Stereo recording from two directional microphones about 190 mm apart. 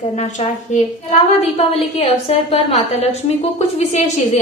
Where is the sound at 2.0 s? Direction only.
30° left (ahead or behind).